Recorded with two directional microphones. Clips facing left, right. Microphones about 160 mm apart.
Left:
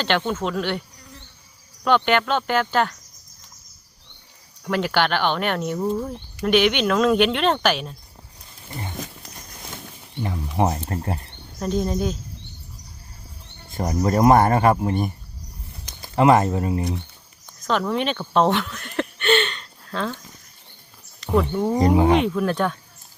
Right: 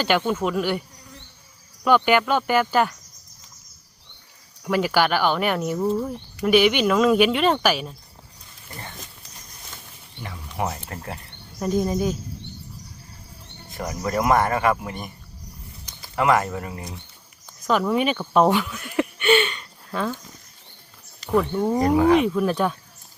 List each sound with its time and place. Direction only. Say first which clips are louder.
0.0 s speech: right 1 dB; 5° right (ahead or behind)
2.0 s speech: right 1 dB; 10° right (ahead or behind)
4.6 s speech: right 1 dB; 10° right (ahead or behind)
10.2 s speech: left 6 dB; 30° left (ahead or behind)
11.6 s speech: right 1 dB; 10° right (ahead or behind)
13.7 s speech: left 6 dB; 35° left (ahead or behind)
16.1 s speech: left 4 dB; 25° left (ahead or behind)
17.7 s a sound: right 2 dB; 5° right (ahead or behind)
21.3 s speech: even; centre (ahead or behind)
21.7 s speech: even; 20° left (ahead or behind)
22.1 s speech: right 1 dB; 5° right (ahead or behind)